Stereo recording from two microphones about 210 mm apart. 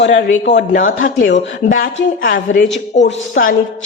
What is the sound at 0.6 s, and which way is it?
A man's voice, 40° left (ahead or behind).